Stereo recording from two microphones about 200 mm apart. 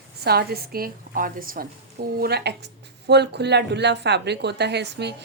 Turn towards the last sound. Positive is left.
turn(degrees=-60)  # may be behind; listen again after turning